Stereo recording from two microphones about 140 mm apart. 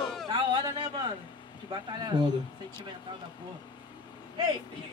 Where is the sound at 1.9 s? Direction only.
30° right (ahead or behind).